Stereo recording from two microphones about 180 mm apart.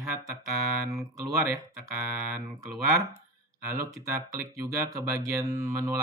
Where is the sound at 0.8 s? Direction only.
20° right (ahead or behind).